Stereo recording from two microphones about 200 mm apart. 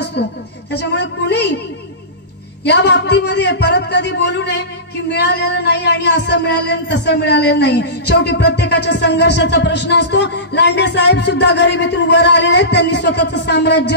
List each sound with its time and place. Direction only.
0.2 s speech: 55° left (ahead or behind)
0.7 s a sound: 60° left (ahead or behind)
2.6 s speech: 60° left (ahead or behind)